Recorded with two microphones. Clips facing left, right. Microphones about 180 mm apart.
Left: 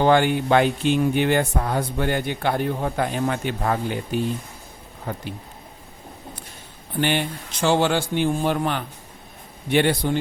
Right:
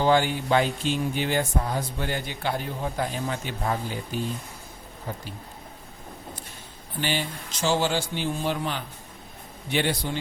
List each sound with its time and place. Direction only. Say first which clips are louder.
0.0 s speech: left 4 dB; 60° left (ahead or behind)
7.0 s speech: left 6 dB; 60° left (ahead or behind)